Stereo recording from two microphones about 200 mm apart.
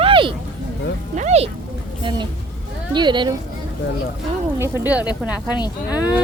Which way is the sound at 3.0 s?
25° right (ahead or behind).